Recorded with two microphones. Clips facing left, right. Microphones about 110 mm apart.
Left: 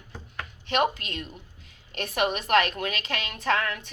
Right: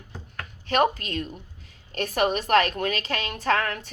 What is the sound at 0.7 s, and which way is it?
A woman's voice, 40° right (ahead or behind).